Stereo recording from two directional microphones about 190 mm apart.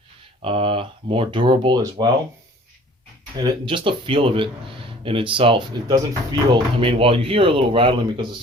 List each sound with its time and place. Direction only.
0.4 s speech: 30° right (ahead or behind)
3.4 s speech: 25° right (ahead or behind)